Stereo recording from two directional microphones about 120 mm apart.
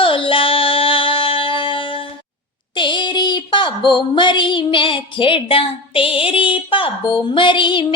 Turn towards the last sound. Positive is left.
turn(degrees=45)  # may be behind; listen again after turning